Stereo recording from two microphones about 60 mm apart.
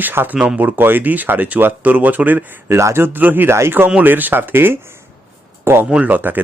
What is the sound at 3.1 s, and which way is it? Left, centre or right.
Speech, right.